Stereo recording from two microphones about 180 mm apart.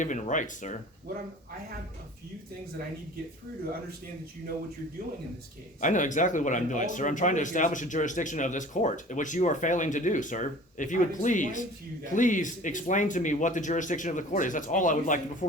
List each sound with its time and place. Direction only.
0.0 s speech: 45° left (ahead or behind)
5.8 s speech: 45° left (ahead or behind)